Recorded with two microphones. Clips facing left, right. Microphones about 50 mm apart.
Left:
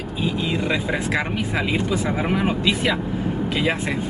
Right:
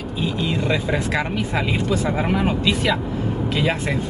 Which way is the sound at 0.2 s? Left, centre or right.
Centre.